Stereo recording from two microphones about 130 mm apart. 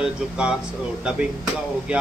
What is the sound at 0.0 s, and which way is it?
Speech, 5° right (ahead or behind).